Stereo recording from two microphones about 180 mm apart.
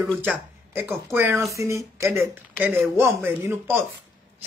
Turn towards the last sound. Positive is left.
turn(degrees=-15)  # may be behind; listen again after turning